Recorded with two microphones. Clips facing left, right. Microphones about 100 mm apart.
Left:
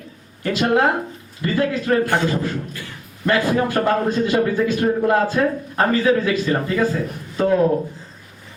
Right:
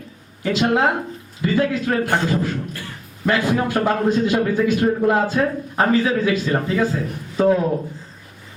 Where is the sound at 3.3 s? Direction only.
20° right (ahead or behind).